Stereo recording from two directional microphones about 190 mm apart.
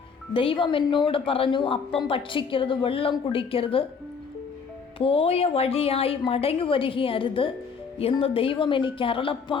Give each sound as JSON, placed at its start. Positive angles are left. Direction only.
{"t": 0.3, "sound": "a woman's voice", "side_deg": 25}
{"t": 4.9, "sound": "a woman's voice", "side_deg": 30}